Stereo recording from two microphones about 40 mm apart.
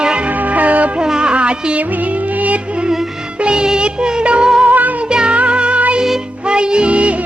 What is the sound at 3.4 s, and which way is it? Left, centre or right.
Music, right.